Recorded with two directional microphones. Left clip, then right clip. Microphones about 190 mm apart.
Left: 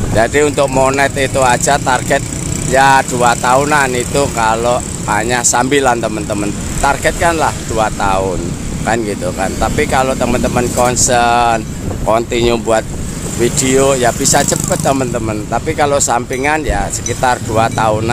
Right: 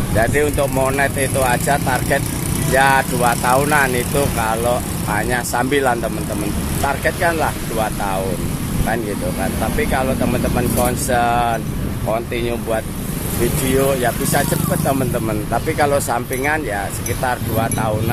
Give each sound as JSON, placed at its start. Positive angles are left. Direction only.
{"t": 0.2, "sound": "speech", "side_deg": 30}